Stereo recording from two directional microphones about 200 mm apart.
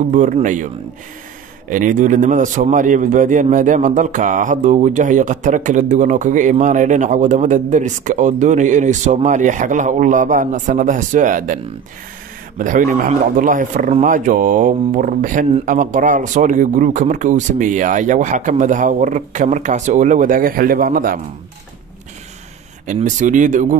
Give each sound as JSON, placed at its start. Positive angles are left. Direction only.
{"t": 0.1, "sound": "a man's voice", "side_deg": -40}
{"t": 1.7, "sound": "a man's voice", "side_deg": -40}
{"t": 22.8, "sound": "a man's voice", "side_deg": -40}